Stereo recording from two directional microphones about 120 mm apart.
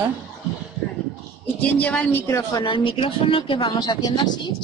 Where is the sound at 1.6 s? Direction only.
10° left (ahead or behind).